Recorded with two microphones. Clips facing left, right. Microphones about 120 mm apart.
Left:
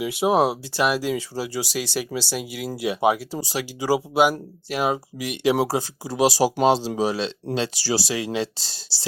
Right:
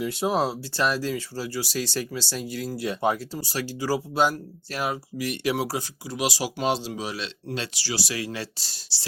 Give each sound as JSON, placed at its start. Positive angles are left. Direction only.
{"t": 0.0, "sound": "speech", "side_deg": 10}